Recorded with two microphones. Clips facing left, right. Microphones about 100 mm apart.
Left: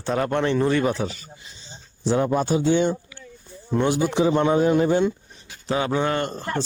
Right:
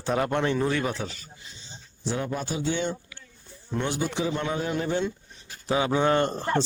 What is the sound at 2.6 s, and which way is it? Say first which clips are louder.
A man's voice: left 8 dB; 20° left (ahead or behind).